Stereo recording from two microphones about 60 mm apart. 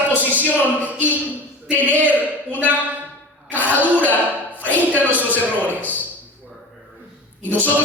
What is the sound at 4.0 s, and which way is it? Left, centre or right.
Speech, left.